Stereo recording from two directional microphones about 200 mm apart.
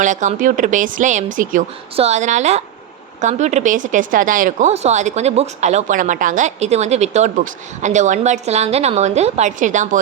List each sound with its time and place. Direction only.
0.0 s speech: 40° right (ahead or behind)